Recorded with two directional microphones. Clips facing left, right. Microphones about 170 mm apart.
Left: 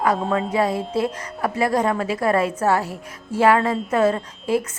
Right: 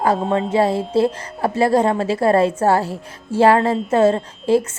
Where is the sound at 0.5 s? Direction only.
30° right (ahead or behind).